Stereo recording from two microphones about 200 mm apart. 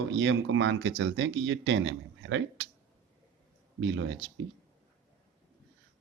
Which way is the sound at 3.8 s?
65° right (ahead or behind).